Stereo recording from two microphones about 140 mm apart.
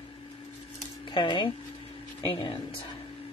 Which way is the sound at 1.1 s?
35° left (ahead or behind).